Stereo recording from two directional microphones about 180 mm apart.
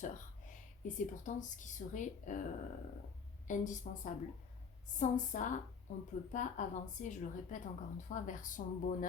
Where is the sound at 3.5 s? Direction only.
45° left (ahead or behind).